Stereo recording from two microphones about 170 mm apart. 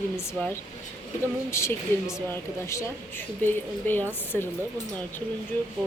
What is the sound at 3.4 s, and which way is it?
Speech, 10° left (ahead or behind).